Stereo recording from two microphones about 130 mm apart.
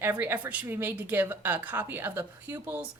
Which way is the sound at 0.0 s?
15° right (ahead or behind).